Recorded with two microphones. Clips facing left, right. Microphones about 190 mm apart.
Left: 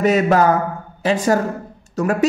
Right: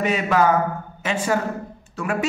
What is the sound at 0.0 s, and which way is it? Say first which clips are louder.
Speech: left 5 dB; 40° left (ahead or behind).